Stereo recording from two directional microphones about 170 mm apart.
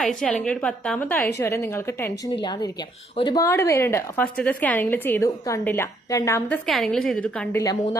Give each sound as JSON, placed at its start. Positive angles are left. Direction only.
{"t": 0.0, "sound": "a woman's voice", "side_deg": 5}
{"t": 2.3, "sound": "a woman's voice", "side_deg": 25}
{"t": 6.7, "sound": "a woman's voice", "side_deg": 0}